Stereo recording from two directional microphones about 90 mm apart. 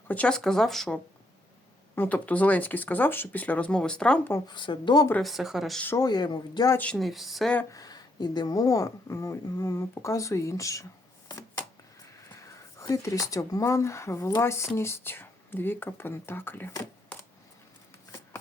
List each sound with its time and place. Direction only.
0.1 s speech: 10° left (ahead or behind)
2.0 s speech: 15° left (ahead or behind)
4.2 s speech: 30° left (ahead or behind)
4.4 s speech: 60° left (ahead or behind)
5.2 s speech: centre (ahead or behind)
6.0 s speech: 50° left (ahead or behind)
6.9 s speech: centre (ahead or behind)
7.7 s speech: 45° left (ahead or behind)
12.4 s speech: 40° left (ahead or behind)
17.1 s coin: 15° left (ahead or behind)